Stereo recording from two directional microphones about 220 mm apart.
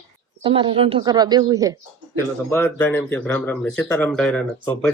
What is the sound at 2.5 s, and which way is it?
Speech, 10° left (ahead or behind).